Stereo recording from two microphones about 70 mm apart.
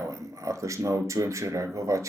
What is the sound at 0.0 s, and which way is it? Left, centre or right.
Speech, right.